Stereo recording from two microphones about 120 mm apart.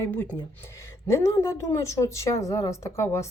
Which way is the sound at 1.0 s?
25° left (ahead or behind).